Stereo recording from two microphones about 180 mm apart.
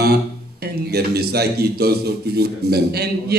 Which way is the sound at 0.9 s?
60° right (ahead or behind).